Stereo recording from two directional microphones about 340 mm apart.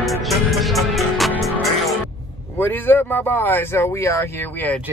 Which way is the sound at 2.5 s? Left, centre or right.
Centre.